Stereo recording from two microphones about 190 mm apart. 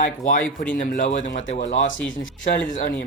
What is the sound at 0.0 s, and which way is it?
Speech, 45° left (ahead or behind).